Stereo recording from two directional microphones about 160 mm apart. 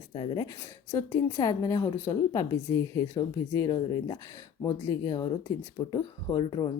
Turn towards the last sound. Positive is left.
turn(degrees=25)  # may be behind; listen again after turning